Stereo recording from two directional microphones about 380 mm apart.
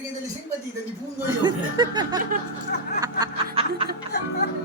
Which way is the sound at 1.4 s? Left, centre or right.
Centre.